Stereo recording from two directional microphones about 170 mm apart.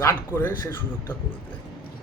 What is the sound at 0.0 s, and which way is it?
Speech, 15° left (ahead or behind).